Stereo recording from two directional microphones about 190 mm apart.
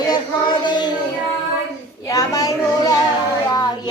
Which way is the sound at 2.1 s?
20° left (ahead or behind).